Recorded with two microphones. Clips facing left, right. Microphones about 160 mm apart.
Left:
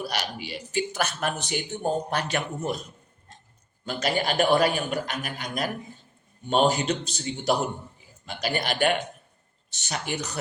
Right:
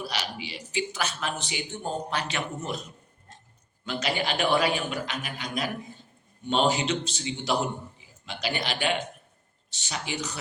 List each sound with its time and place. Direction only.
0.1 s a man's voice: 50° left (ahead or behind)
3.8 s a man's voice: 45° left (ahead or behind)